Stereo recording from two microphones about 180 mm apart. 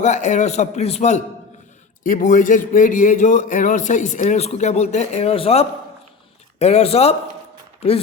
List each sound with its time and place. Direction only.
0.0 s a man's voice: 40° left (ahead or behind)